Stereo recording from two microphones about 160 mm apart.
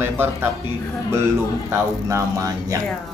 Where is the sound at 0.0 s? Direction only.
15° right (ahead or behind).